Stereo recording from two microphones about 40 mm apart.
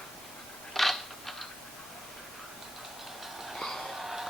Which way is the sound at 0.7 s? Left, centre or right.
Centre.